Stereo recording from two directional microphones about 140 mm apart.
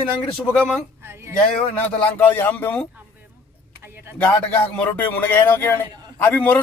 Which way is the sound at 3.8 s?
15° right (ahead or behind).